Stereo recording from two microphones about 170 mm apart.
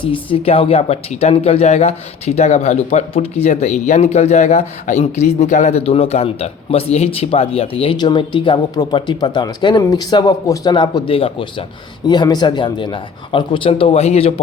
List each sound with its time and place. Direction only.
0.0 s a man's voice: 30° left (ahead or behind)